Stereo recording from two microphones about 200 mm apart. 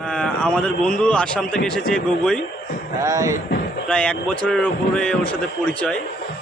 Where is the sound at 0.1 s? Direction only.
5° left (ahead or behind).